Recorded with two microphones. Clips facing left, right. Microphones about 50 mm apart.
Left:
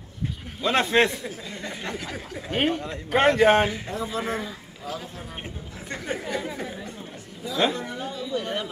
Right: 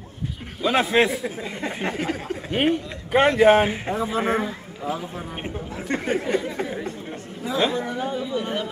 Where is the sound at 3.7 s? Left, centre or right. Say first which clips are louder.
Right 5 dB; right.